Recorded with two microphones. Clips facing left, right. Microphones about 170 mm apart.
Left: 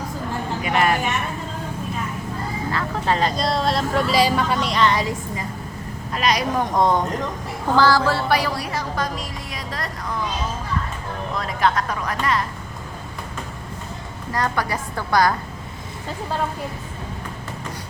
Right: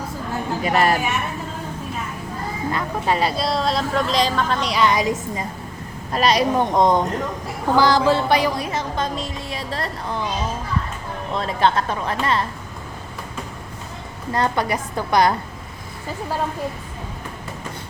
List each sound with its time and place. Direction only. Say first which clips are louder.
0.6 s a woman's voice: right 2 dB; 35° right (ahead or behind)
2.7 s speech: even; 10° right (ahead or behind); by 4.7 s 10° left (ahead or behind)
4.7 s a woman's voice: right 1 dB; 10° right (ahead or behind)
6.1 s a woman's voice: right 3 dB; 30° right (ahead or behind)
11.3 s speech: right 2 dB; 30° right (ahead or behind)
14.3 s speech: right 3 dB; 25° right (ahead or behind)